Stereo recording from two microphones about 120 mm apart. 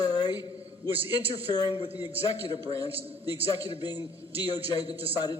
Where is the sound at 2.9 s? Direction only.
50° right (ahead or behind).